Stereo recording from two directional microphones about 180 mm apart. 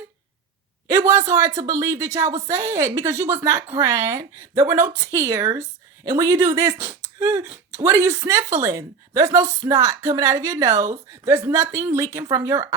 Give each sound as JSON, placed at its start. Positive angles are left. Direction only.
{"t": 0.9, "sound": "a woman's voice", "side_deg": -20}